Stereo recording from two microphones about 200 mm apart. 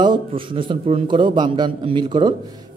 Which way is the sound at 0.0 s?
25° right (ahead or behind).